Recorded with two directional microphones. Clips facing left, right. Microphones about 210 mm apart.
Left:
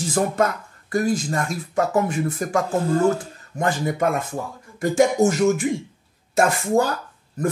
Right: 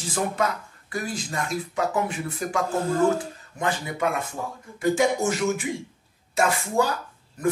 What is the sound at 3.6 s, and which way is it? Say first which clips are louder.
Speech: left 5 dB; 45° left (ahead or behind).